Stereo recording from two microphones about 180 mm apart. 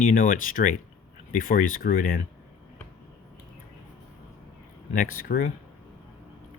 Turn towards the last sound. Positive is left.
turn(degrees=50)  # may be behind; listen again after turning